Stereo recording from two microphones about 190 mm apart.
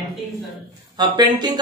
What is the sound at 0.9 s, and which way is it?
Speech, 20° right (ahead or behind).